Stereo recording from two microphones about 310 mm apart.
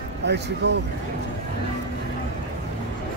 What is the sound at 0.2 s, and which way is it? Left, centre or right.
Speech, right.